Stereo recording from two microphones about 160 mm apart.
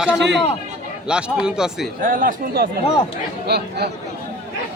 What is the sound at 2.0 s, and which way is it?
Speech, 55° right (ahead or behind).